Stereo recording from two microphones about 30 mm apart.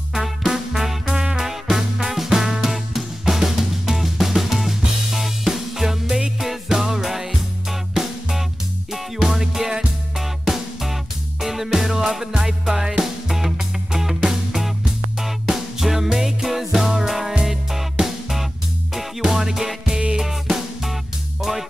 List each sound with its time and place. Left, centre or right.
0.5 s music: centre
1.1 s music: right
1.4 s music: centre
20.2 s drum: centre